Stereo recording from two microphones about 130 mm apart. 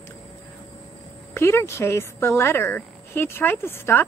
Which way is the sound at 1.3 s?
20° left (ahead or behind).